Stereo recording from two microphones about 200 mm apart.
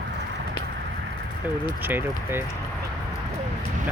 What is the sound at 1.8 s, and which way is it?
Speech, 10° right (ahead or behind).